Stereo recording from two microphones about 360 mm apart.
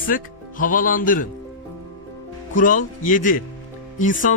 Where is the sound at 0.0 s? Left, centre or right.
Left.